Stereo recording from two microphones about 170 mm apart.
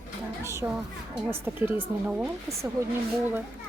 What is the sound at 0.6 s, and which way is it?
A woman's voice, 15° right (ahead or behind).